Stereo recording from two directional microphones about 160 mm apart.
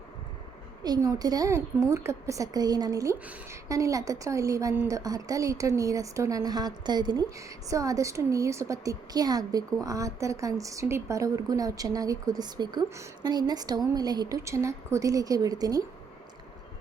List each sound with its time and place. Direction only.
0.9 s a woman's voice: 25° right (ahead or behind)